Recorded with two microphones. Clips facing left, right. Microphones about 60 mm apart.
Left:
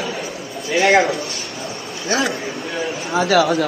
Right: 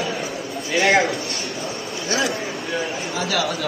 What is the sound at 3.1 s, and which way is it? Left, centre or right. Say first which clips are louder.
Speech: left 10 dB; left.